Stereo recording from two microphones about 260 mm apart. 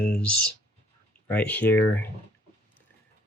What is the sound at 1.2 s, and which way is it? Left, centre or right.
Speech, centre.